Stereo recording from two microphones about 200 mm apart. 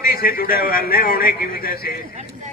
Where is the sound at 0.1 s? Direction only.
50° left (ahead or behind).